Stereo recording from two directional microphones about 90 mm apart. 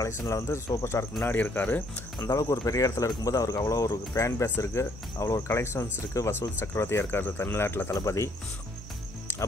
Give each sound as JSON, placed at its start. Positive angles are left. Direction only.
{"t": 0.0, "sound": "speech", "side_deg": 35}
{"t": 1.2, "sound": "speech", "side_deg": 20}
{"t": 2.1, "sound": "speech", "side_deg": 35}